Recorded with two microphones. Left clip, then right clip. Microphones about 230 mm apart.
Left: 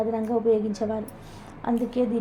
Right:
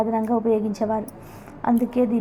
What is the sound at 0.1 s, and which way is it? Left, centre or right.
A woman's voice, centre.